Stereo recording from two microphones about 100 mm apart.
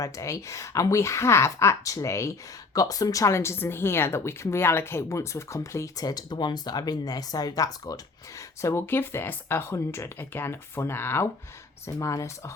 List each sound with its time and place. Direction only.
0.0 s speech: 30° left (ahead or behind)
8.4 s speech: 30° left (ahead or behind)
11.9 s speech: 35° left (ahead or behind)